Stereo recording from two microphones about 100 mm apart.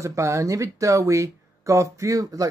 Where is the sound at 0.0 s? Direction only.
30° right (ahead or behind).